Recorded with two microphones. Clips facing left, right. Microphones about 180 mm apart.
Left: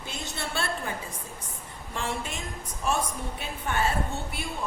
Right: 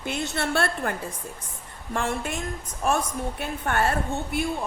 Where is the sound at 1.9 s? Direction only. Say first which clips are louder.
Right 5 dB; 55° right (ahead or behind).